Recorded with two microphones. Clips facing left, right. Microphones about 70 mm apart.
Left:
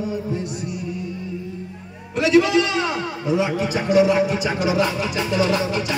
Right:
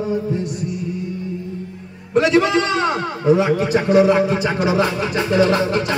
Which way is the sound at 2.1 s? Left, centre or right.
Right.